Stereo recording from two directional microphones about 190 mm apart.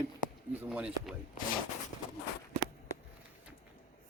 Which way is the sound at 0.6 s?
5° right (ahead or behind).